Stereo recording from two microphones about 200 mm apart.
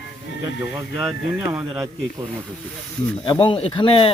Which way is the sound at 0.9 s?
15° right (ahead or behind).